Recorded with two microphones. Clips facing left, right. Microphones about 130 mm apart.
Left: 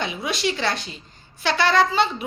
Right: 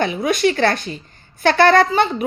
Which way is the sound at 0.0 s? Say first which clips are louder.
Right 8 dB; 50° right (ahead or behind).